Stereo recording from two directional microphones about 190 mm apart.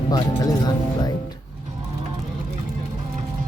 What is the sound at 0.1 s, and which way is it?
Speech, 20° left (ahead or behind).